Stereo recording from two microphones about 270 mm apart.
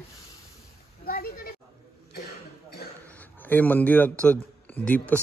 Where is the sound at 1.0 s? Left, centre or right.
Left.